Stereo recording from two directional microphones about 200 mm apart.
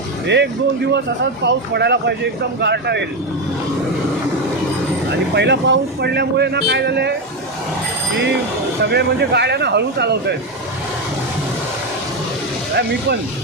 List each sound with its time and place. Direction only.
0.3 s speech: 60° right (ahead or behind)
5.3 s speech: 60° right (ahead or behind)
8.8 s speech: 55° right (ahead or behind)
12.7 s speech: 55° right (ahead or behind)